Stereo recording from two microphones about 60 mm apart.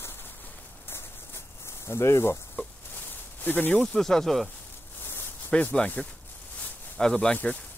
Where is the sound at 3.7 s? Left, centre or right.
Centre.